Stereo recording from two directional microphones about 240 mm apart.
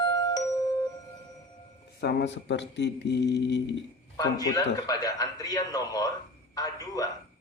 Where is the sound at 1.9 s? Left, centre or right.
Left.